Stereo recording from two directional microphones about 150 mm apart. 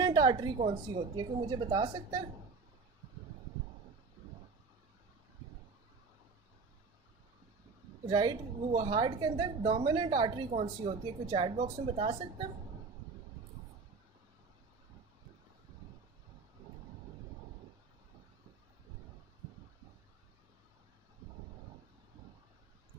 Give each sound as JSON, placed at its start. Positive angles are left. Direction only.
{"t": 0.0, "sound": "a sound", "side_deg": -30}
{"t": 1.1, "sound": "a woman's voice", "side_deg": -30}
{"t": 8.1, "sound": "a woman's voice", "side_deg": -30}
{"t": 10.5, "sound": "speech", "side_deg": -50}
{"t": 11.3, "sound": "a woman's voice", "side_deg": -35}